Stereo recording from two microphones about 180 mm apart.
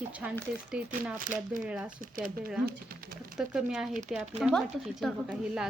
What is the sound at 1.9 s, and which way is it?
Speech, 50° right (ahead or behind).